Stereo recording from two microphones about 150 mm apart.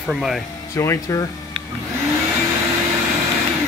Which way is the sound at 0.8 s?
20° left (ahead or behind).